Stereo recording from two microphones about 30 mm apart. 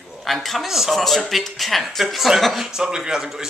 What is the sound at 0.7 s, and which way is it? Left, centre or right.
Speech, centre.